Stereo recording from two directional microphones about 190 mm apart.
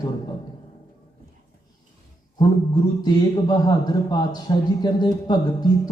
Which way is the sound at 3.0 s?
20° left (ahead or behind).